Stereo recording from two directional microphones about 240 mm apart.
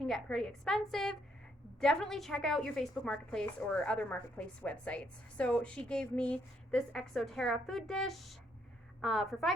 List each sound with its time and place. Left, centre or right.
0.0 s a woman's voice: centre